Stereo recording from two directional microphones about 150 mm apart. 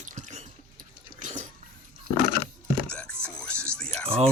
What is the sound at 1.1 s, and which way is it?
Drip, 55° right (ahead or behind).